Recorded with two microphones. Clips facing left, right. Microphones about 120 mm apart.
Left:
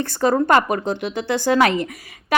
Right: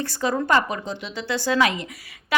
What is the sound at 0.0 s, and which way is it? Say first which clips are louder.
Speech: left 6 dB; 45° left (ahead or behind).